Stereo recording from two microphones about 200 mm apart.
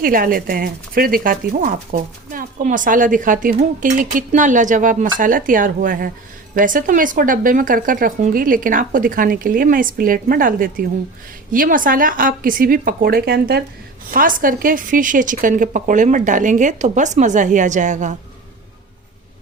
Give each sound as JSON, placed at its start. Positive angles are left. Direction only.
{"t": 0.0, "sound": "a woman's voice", "side_deg": -45}